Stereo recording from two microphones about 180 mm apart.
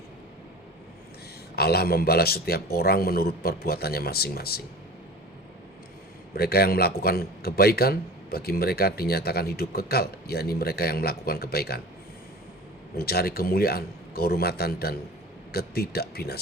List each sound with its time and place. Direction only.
1.5 s a man's voice: 60° left (ahead or behind)
6.3 s a man's voice: 60° left (ahead or behind)
13.0 s a man's voice: 60° left (ahead or behind)